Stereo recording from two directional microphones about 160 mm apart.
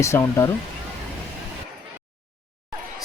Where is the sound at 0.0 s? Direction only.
15° left (ahead or behind).